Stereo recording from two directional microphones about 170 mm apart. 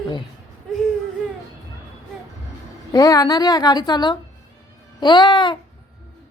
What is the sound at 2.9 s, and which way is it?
A woman's voice, 20° left (ahead or behind).